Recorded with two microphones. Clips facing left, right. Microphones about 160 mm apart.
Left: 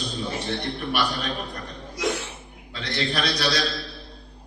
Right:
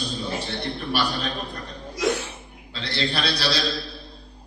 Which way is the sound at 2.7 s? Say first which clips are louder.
Even; 30° right (ahead or behind).